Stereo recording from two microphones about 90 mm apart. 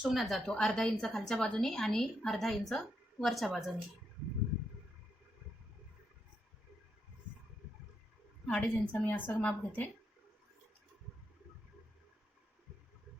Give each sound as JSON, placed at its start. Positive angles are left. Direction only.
{"t": 0.0, "sound": "a woman's voice", "side_deg": 0}
{"t": 8.4, "sound": "a woman's voice", "side_deg": 15}